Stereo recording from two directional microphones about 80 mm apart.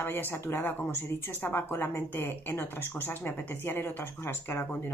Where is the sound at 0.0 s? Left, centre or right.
Left.